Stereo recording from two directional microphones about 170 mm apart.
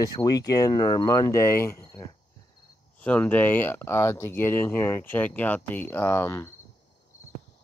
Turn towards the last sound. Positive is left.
turn(degrees=15)  # may be behind; listen again after turning